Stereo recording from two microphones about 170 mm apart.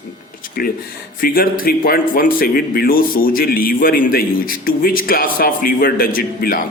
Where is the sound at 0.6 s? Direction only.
60° left (ahead or behind).